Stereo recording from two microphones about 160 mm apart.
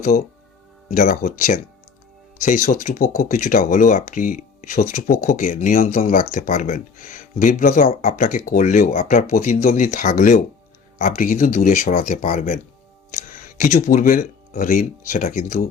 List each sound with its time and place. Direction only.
0.9 s speech: 55° left (ahead or behind)
13.6 s speech: 55° left (ahead or behind)